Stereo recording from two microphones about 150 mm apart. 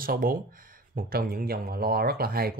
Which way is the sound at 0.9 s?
85° right.